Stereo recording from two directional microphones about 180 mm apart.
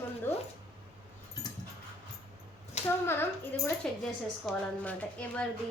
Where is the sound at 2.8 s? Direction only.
35° left (ahead or behind).